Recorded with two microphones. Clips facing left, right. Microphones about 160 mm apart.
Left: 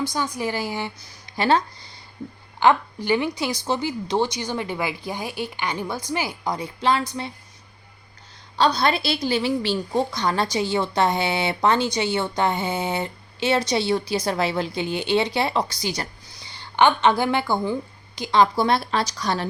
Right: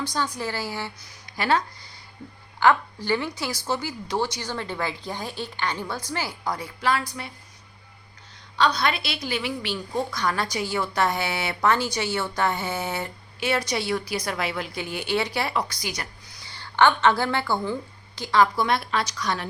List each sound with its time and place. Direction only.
0.0 s a woman's voice: 10° left (ahead or behind)
8.5 s a woman's voice: 30° left (ahead or behind)